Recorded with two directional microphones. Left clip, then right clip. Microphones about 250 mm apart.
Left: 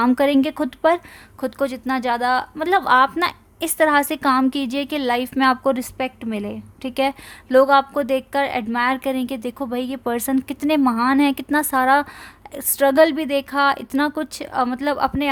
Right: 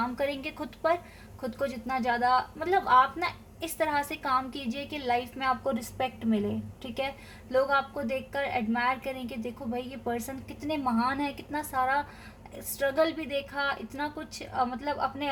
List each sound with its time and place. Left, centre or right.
0.0 s a woman's voice: left
7.5 s a woman's voice: left
15.2 s speech: left